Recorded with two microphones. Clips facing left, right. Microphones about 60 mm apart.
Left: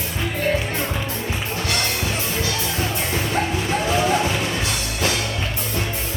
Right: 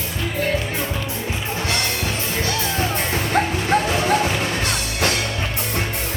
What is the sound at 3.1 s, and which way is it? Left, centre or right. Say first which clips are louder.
Music: right 2 dB; right.